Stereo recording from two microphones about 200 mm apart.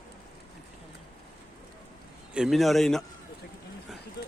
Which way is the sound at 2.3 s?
Centre (ahead or behind).